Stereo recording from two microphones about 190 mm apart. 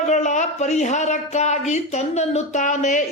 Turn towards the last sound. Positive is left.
turn(degrees=40)  # may be behind; listen again after turning